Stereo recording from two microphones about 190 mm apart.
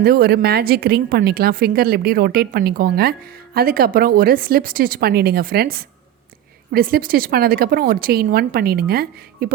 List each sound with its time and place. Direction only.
0.0 s a woman's voice: 55° right (ahead or behind)